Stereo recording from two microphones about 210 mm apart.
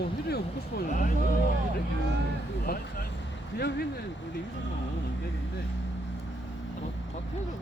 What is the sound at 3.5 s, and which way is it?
Speech, 50° left (ahead or behind).